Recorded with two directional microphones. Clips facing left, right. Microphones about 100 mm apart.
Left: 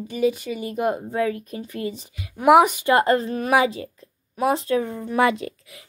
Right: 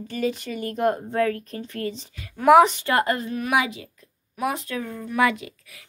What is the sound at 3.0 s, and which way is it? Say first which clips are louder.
A woman's voice: left 2 dB; 30° left (ahead or behind).